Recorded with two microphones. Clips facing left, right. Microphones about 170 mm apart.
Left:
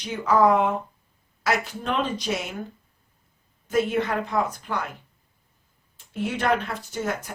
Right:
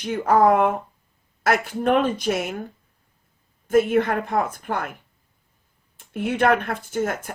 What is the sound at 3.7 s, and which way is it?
Speech, 50° right (ahead or behind).